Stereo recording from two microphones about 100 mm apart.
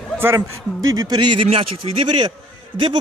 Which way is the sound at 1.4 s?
80° right.